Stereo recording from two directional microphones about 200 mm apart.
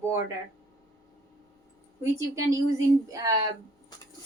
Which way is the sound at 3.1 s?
15° right (ahead or behind).